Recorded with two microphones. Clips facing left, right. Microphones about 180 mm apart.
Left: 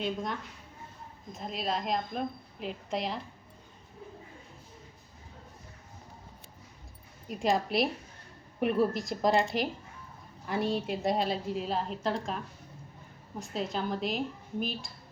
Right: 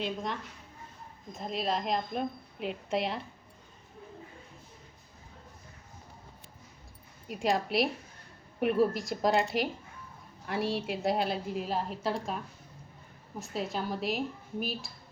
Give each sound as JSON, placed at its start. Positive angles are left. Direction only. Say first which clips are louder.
{"t": 0.0, "sound": "a woman's voice", "louder": "left 1 dB", "side_deg": 0}
{"t": 7.3, "sound": "a woman's voice", "louder": "left 1 dB", "side_deg": 0}
{"t": 13.4, "sound": "a woman's voice", "louder": "left 1 dB", "side_deg": -5}